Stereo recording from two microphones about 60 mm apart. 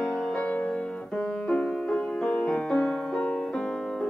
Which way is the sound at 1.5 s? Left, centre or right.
Centre.